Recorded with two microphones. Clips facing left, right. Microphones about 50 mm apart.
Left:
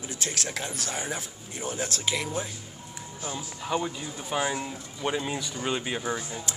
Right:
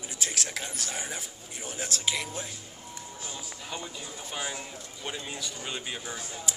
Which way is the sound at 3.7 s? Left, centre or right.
Left.